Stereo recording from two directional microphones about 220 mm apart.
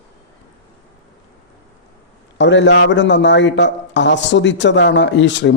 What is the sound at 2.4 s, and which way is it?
A man's voice, 55° left (ahead or behind).